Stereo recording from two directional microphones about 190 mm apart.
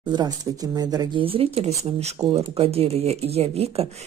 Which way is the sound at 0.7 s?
20° right (ahead or behind).